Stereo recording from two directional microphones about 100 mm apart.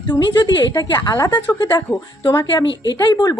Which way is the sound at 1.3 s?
50° left (ahead or behind).